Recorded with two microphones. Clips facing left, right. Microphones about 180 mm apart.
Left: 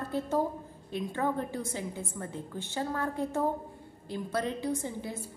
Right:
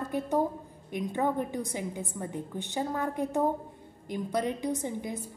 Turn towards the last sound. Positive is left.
turn(degrees=-15)  # may be behind; listen again after turning